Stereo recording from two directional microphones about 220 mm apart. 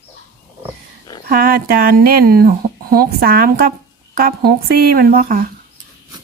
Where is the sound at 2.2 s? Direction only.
40° right (ahead or behind).